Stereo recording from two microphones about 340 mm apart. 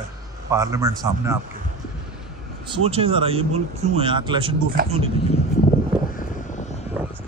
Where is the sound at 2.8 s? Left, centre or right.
Centre.